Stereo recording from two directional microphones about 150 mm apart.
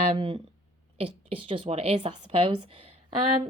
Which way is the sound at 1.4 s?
40° right (ahead or behind).